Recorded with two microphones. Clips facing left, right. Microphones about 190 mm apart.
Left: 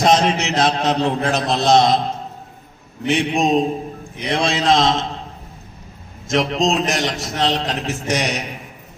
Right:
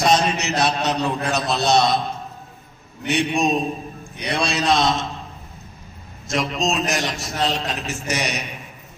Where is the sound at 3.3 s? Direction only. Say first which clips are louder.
Left 4 dB; 20° left (ahead or behind).